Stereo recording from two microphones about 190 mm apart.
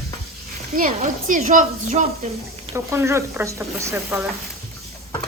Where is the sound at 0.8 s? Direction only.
45° right (ahead or behind).